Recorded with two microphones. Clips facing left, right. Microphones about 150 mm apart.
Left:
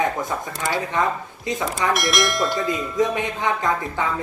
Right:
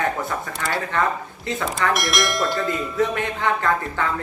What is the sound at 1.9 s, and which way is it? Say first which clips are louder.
Speech: left 1 dB; centre (ahead or behind).